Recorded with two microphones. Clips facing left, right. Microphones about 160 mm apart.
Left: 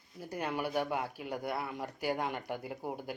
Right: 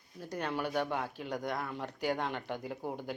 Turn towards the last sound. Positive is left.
turn(degrees=10)  # may be behind; listen again after turning